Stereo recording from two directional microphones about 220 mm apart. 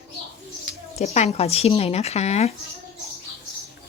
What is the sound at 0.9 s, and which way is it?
Speech, 30° left (ahead or behind).